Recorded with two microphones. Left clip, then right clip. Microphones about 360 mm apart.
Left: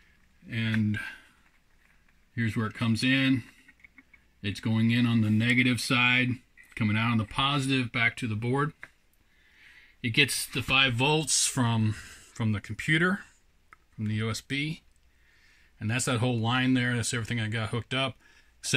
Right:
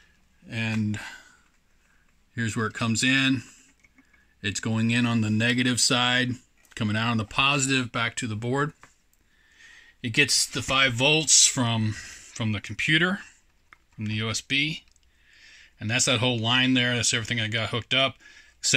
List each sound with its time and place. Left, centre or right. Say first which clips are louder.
0.5 s a sound: right 1 dB; centre
2.3 s speech: right 4 dB; centre
6.8 s speech: right 2 dB; centre